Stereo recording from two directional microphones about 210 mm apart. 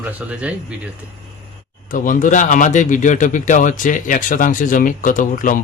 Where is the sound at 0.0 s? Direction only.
10° right (ahead or behind).